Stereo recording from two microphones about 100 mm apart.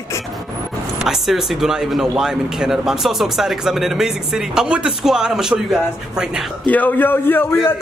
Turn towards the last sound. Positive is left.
turn(degrees=20)  # may be behind; listen again after turning